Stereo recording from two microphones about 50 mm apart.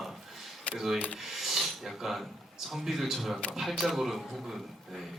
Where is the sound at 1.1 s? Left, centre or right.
Centre.